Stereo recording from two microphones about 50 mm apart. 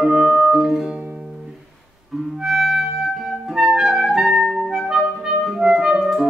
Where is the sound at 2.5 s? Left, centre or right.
Centre.